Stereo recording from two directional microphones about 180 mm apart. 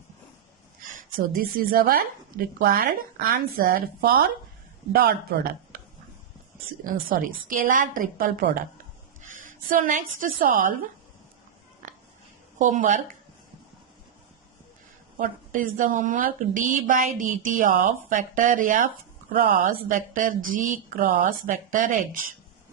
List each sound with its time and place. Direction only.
0.9 s a woman's voice: 55° right (ahead or behind)
7.1 s a woman's voice: 50° right (ahead or behind)
11.8 s a sound: 45° right (ahead or behind)
12.5 s speech: 45° right (ahead or behind)
15.2 s a woman's voice: 50° right (ahead or behind)